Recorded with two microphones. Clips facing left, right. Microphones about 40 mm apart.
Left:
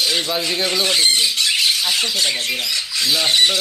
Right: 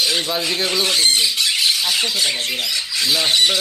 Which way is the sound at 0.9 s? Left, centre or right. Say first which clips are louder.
Even; left.